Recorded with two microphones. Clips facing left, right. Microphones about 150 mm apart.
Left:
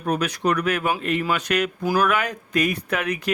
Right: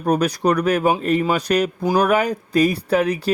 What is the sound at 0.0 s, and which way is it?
A man's voice, 35° right (ahead or behind).